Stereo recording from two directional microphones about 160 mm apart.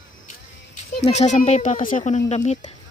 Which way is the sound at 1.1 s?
45° left (ahead or behind).